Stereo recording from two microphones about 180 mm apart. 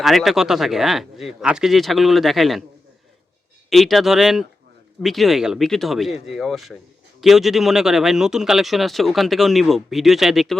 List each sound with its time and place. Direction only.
0.0 s speech: centre (ahead or behind)
3.7 s speech: centre (ahead or behind)